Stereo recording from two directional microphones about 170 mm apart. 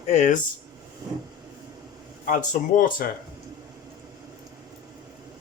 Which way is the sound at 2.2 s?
50° left (ahead or behind).